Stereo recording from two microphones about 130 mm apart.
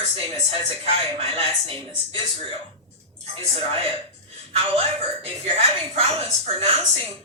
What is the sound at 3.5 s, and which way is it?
Speech, 50° right (ahead or behind).